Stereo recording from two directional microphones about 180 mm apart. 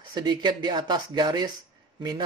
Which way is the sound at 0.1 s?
25° right (ahead or behind).